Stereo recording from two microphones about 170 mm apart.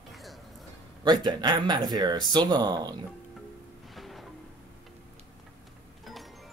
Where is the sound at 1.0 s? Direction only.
25° right (ahead or behind).